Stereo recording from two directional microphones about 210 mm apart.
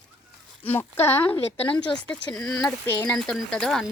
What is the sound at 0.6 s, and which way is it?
Speech, 10° left (ahead or behind).